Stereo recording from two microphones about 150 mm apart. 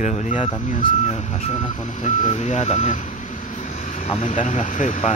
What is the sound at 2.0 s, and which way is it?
Speech, 50° left (ahead or behind).